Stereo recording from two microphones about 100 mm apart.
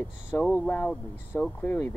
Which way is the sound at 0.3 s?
20° left (ahead or behind).